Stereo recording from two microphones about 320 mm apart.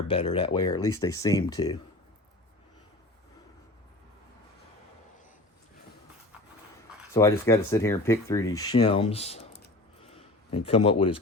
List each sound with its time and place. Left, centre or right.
0.1 s speech: centre
7.1 s speech: centre
10.1 s a sound: centre